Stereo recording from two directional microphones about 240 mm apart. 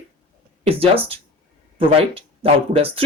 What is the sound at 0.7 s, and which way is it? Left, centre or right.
Speech, right.